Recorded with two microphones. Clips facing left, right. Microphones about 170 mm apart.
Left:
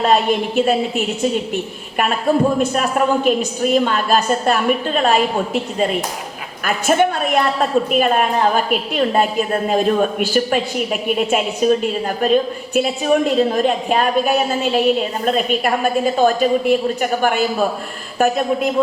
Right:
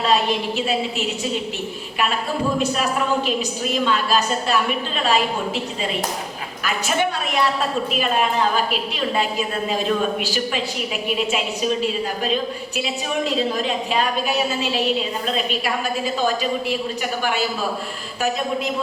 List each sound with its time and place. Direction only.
0.0 s a woman's voice: 50° left (ahead or behind)
3.2 s a woman's voice: 50° left (ahead or behind)